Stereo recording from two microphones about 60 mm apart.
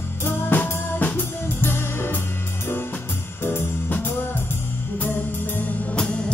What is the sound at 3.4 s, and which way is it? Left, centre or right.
Music, left.